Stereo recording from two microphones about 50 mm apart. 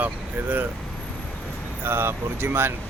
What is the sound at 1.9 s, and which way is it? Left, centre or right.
Speech, right.